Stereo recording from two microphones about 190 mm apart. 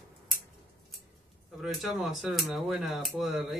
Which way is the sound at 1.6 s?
Centre (ahead or behind).